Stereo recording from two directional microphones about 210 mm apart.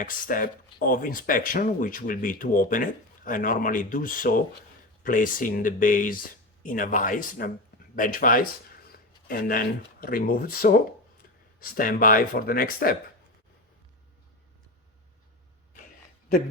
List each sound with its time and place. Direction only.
0.0 s speech: 40° left (ahead or behind)